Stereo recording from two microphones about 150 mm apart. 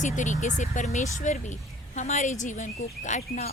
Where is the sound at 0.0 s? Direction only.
55° left (ahead or behind).